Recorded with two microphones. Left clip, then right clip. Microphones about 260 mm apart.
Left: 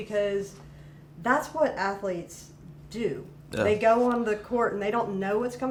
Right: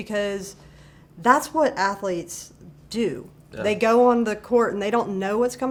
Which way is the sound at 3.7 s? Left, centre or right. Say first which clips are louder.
Right 5 dB; right.